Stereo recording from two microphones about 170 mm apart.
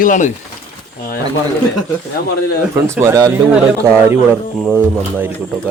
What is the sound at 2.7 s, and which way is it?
Speech, 15° right (ahead or behind).